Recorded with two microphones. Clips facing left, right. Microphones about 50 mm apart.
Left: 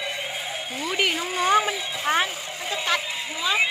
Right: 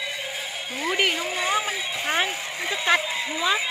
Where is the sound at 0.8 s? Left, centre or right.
Centre.